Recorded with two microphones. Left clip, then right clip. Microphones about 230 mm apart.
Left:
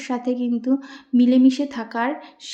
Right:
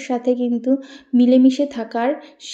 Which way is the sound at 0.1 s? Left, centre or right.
Centre.